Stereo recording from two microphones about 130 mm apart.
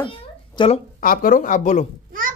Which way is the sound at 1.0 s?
90° left.